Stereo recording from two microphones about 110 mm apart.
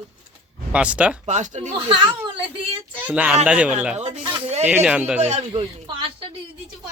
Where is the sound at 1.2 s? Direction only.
90° right.